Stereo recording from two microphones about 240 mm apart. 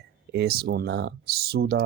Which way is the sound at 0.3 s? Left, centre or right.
Right.